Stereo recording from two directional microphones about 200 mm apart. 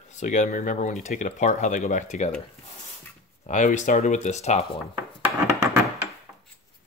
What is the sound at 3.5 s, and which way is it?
Speech, 35° left (ahead or behind).